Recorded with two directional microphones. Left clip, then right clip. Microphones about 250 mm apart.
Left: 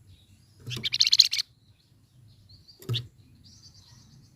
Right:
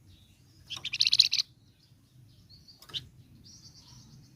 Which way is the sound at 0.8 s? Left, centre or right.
Left.